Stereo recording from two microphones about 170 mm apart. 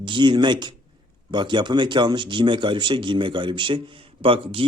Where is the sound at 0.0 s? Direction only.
30° right (ahead or behind).